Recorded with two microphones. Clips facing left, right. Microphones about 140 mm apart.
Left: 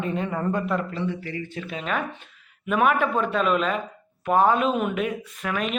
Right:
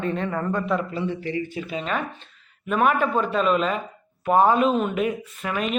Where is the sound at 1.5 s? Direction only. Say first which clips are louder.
Right 2 dB; 5° right (ahead or behind).